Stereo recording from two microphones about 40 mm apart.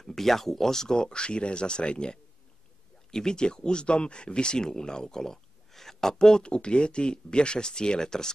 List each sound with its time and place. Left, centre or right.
0.0 s speech: centre
6.2 s speech: left